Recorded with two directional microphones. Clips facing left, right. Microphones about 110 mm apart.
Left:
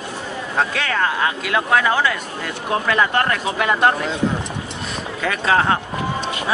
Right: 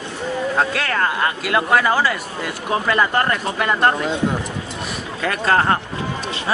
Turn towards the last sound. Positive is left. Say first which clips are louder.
# even
turn(degrees=0)  # may be behind; listen again after turning